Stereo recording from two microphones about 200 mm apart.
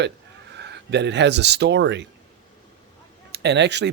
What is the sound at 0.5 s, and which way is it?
Speech, 55° right (ahead or behind).